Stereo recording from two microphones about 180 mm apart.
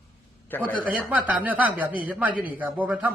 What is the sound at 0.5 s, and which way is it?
Speech, 10° left (ahead or behind).